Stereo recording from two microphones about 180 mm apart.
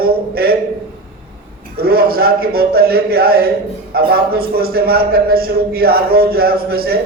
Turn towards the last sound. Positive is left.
turn(degrees=-60)  # may be behind; listen again after turning